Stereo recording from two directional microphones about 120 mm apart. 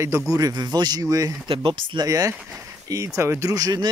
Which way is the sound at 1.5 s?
45° right (ahead or behind).